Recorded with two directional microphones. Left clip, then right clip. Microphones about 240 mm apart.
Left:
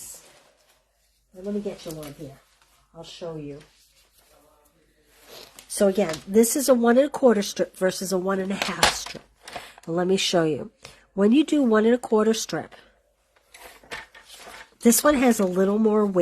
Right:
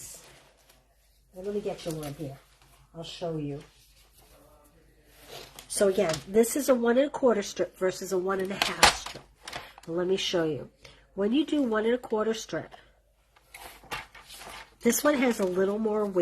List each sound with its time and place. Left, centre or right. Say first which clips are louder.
1.9 s speech: right 1 dB; centre
3.0 s speech: even; left
5.7 s speech: left 3 dB; left
9.9 s speech: left 5 dB; left
14.8 s speech: left 5 dB; left